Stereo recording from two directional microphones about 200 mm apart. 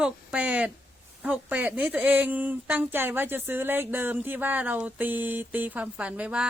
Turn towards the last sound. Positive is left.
turn(degrees=-5)  # may be behind; listen again after turning